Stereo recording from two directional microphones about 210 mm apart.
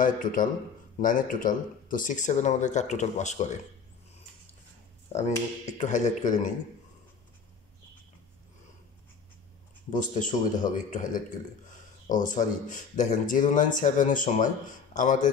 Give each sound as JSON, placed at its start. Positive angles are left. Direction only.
{"t": 0.0, "sound": "speech", "side_deg": 40}
{"t": 5.1, "sound": "speech", "side_deg": 35}
{"t": 9.8, "sound": "speech", "side_deg": 35}